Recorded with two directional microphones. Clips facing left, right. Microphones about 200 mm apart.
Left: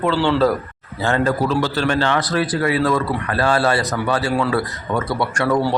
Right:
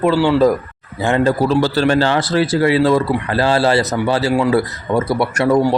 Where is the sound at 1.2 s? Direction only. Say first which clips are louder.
Right 6 dB; 35° right (ahead or behind).